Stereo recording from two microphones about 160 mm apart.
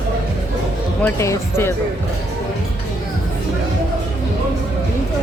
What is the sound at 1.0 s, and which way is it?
Speech, 15° left (ahead or behind).